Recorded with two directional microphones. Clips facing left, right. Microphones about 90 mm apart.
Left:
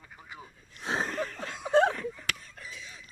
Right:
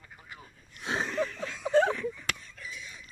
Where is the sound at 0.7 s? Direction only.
35° left (ahead or behind).